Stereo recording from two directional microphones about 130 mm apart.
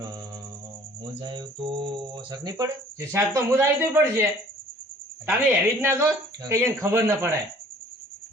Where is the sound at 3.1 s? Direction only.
20° right (ahead or behind).